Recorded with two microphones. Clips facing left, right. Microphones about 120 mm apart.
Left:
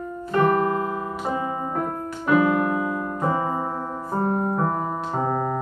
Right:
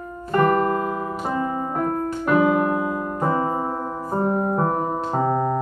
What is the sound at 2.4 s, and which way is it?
Music, 15° right (ahead or behind).